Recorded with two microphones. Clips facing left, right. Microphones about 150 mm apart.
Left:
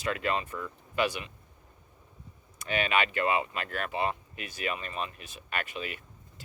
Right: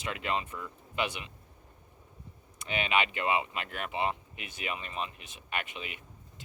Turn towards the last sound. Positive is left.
turn(degrees=-20)  # may be behind; listen again after turning